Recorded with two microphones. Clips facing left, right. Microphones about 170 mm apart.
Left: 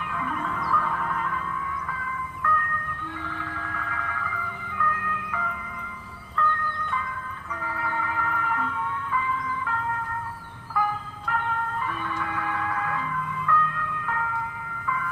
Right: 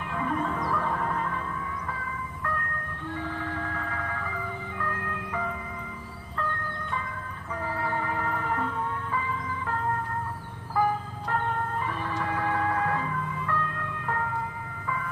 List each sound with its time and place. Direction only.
0.1 s music: 35° right (ahead or behind)
3.3 s music: 30° right (ahead or behind)